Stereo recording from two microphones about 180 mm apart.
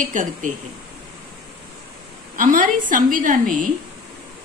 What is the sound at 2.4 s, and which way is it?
A woman's voice, 50° right (ahead or behind).